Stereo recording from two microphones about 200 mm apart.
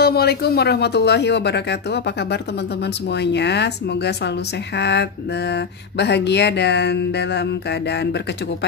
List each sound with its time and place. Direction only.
0.0 s speech: 50° left (ahead or behind)
3.1 s speech: 60° left (ahead or behind)